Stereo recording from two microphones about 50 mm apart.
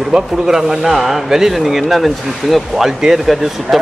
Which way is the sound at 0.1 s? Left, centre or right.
Centre.